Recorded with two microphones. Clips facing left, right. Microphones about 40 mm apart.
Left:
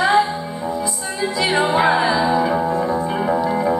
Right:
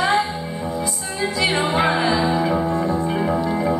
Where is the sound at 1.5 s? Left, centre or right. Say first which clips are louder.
Left 6 dB; centre.